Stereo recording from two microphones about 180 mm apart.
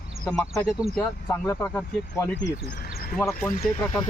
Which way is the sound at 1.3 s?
10° left (ahead or behind).